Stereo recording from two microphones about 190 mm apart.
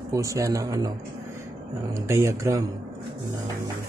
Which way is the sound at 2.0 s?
15° right (ahead or behind).